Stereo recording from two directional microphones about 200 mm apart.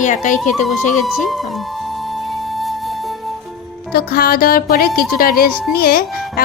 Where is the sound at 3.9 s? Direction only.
50° left (ahead or behind).